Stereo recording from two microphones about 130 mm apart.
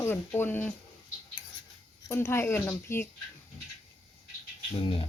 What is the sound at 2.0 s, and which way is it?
Speech, 20° left (ahead or behind).